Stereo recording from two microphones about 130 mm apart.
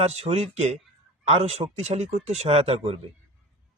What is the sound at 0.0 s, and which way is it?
A man's voice, 55° right (ahead or behind).